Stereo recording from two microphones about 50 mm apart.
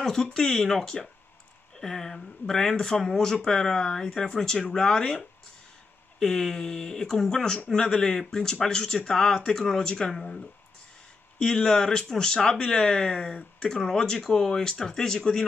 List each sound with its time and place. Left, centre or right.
0.0 s speech: centre